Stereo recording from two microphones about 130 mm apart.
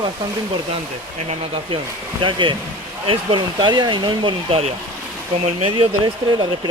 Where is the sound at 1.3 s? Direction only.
45° right (ahead or behind).